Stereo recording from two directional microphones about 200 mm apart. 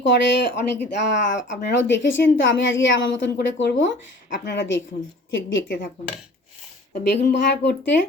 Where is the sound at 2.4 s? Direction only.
70° left (ahead or behind).